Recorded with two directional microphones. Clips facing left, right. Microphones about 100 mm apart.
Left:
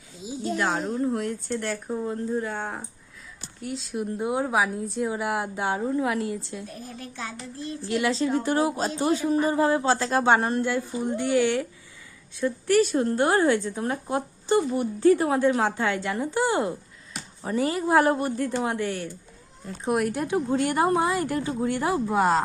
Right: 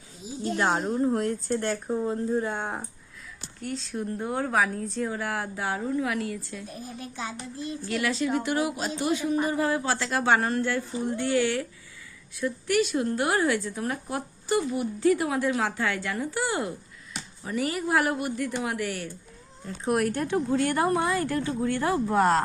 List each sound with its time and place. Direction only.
0.8 s a woman's voice: 20° right (ahead or behind)
1.1 s speech: 40° right (ahead or behind)
1.5 s a woman's voice: 30° right (ahead or behind)
3.6 s a woman's voice: 10° left (ahead or behind)
6.8 s a child's voice: 15° right (ahead or behind)
7.9 s a woman's voice: 25° left (ahead or behind)
12.4 s a woman's voice: 30° left (ahead or behind)
19.6 s speech: 5° left (ahead or behind)
20.5 s speech: 20° left (ahead or behind); by 22.4 s 5° left (ahead or behind)